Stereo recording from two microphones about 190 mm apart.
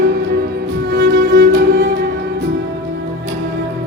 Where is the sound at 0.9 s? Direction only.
70° right (ahead or behind).